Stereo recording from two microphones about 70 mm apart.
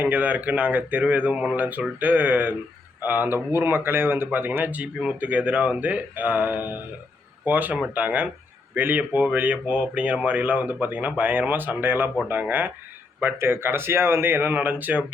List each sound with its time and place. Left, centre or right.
0.0 s speech: right